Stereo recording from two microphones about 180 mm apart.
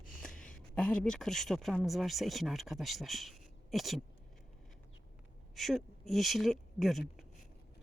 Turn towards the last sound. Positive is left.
turn(degrees=0)  # may be behind; listen again after turning